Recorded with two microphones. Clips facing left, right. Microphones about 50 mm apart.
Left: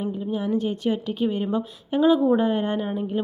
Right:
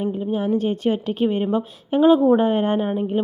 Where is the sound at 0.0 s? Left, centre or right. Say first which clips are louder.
Right 4 dB; right.